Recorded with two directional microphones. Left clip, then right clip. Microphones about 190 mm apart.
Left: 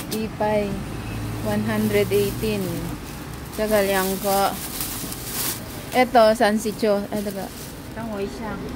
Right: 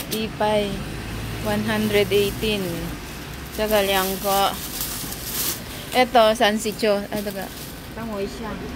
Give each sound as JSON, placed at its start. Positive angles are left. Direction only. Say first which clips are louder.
{"t": 0.4, "sound": "speech", "louder": "right 1 dB", "side_deg": 0}
{"t": 5.9, "sound": "speech", "louder": "even", "side_deg": 20}